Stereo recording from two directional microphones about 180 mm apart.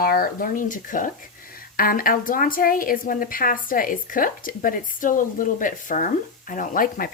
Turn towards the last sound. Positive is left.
turn(degrees=50)  # may be behind; listen again after turning